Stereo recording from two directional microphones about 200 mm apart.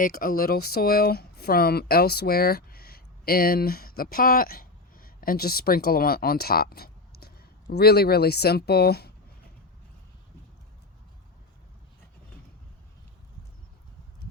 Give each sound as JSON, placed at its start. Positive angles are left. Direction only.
{"t": 0.0, "sound": "speech", "side_deg": 45}